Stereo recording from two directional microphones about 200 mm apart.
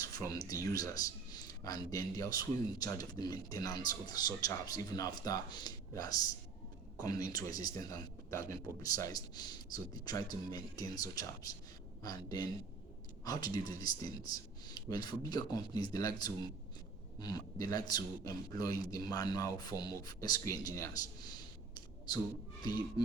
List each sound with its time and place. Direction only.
0.0 s speech: 20° left (ahead or behind)